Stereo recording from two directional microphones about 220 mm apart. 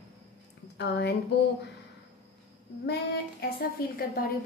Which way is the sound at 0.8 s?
50° left (ahead or behind).